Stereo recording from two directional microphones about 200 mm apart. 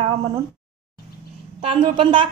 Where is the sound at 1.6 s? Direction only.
25° right (ahead or behind).